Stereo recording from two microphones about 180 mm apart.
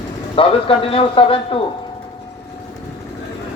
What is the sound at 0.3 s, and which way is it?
Speech, 30° left (ahead or behind).